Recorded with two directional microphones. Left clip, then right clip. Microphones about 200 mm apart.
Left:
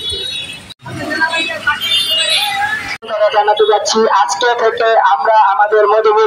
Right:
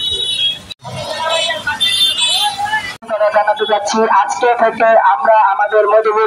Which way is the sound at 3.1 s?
30° left (ahead or behind).